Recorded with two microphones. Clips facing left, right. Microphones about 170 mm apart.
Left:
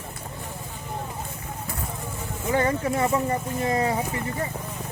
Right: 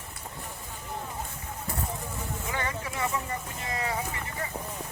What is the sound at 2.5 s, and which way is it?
Speech, 40° left (ahead or behind).